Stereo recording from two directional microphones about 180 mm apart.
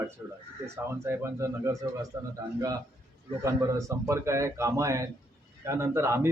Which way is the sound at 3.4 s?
15° right (ahead or behind).